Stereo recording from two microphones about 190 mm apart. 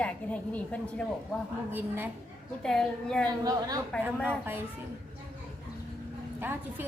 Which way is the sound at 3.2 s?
20° right (ahead or behind).